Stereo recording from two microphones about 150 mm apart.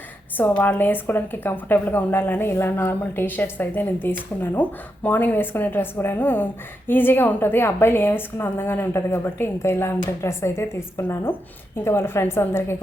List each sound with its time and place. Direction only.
0.3 s speech: 10° left (ahead or behind)